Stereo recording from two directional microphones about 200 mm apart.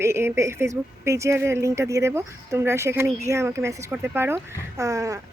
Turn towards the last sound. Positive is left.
turn(degrees=-15)  # may be behind; listen again after turning